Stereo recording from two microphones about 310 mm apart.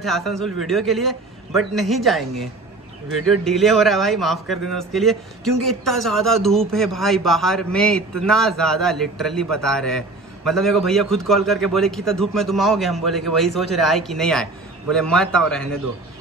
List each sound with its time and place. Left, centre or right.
0.0 s a man's voice: centre